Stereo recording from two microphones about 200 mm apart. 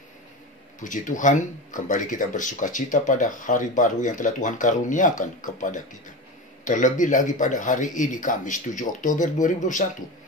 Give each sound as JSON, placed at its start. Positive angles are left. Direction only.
{"t": 0.7, "sound": "speech", "side_deg": 40}